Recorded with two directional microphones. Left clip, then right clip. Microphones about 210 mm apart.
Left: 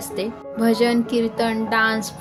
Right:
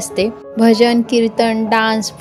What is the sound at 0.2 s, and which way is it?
Speech, 30° right (ahead or behind).